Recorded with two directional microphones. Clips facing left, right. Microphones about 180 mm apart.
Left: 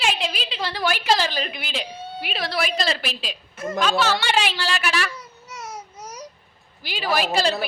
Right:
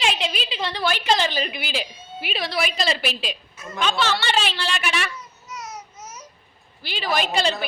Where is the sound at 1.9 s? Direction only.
65° left (ahead or behind).